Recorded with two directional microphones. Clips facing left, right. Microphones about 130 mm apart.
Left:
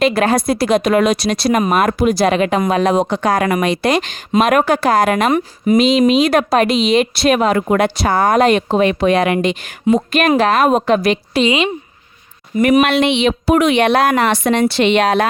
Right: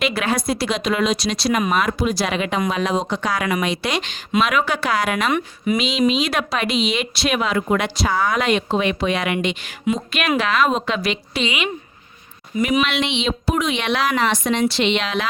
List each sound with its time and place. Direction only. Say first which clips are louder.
0.0 s speech: left 7 dB; 45° left (ahead or behind)
11.4 s a woman's voice: left 8 dB; 30° left (ahead or behind)
12.5 s speech: left 7 dB; 55° left (ahead or behind)